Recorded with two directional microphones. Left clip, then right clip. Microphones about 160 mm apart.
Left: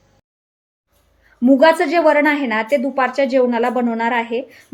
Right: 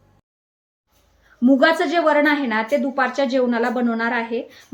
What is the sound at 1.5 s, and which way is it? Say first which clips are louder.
A woman's voice: left 4 dB; 25° left (ahead or behind).